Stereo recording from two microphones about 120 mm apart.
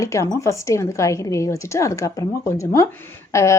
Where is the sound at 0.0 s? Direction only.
25° left (ahead or behind).